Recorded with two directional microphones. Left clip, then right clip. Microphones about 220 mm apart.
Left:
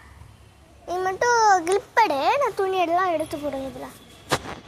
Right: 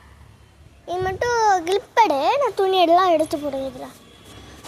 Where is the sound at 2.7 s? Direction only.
30° right (ahead or behind).